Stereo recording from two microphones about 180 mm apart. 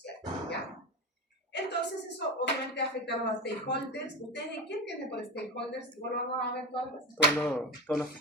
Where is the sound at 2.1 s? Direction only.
70° left (ahead or behind).